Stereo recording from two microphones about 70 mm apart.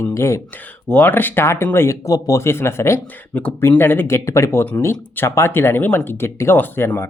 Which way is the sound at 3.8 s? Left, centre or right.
Left.